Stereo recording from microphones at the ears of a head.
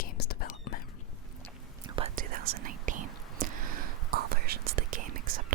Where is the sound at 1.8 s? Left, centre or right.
Right.